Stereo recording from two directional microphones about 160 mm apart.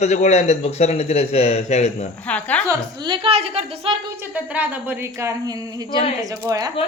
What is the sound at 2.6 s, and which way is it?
A woman's voice, 25° right (ahead or behind).